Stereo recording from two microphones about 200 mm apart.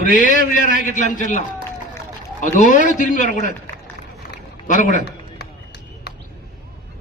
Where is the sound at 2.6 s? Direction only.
40° left (ahead or behind).